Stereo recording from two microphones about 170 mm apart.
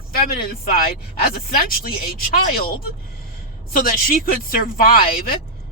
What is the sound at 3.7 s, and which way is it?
A man's voice, 55° left (ahead or behind).